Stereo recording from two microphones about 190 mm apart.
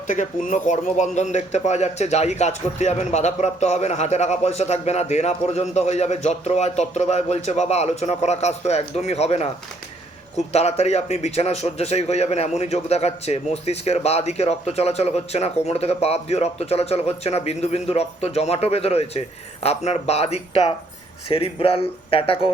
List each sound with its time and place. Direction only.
0.1 s a man's voice: 40° left (ahead or behind)